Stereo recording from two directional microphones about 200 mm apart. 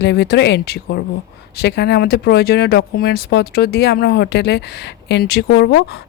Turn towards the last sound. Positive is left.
turn(degrees=55)  # may be behind; listen again after turning